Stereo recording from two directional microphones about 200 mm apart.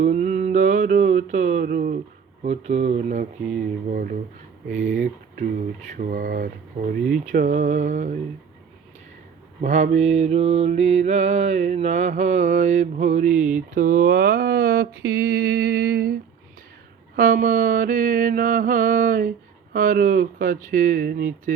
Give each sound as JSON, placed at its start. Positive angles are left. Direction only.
{"t": 0.0, "sound": "mantra", "side_deg": -35}
{"t": 2.4, "sound": "mantra", "side_deg": -35}
{"t": 9.6, "sound": "mantra", "side_deg": -35}
{"t": 17.2, "sound": "mantra", "side_deg": -45}